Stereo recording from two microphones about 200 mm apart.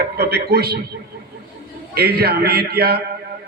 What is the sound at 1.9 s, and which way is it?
A man's voice, 50° right (ahead or behind).